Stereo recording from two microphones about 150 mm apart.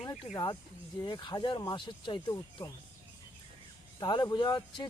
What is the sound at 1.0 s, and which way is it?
Speech, 30° left (ahead or behind).